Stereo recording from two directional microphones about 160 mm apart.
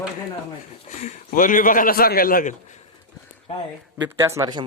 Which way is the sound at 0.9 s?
45° left (ahead or behind).